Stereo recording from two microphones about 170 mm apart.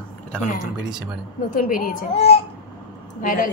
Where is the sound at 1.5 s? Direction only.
50° left (ahead or behind).